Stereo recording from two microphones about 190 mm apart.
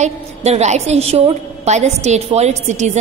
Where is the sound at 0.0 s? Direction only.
35° right (ahead or behind).